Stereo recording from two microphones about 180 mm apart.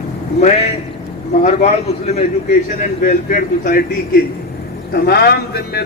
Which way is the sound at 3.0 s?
50° left (ahead or behind).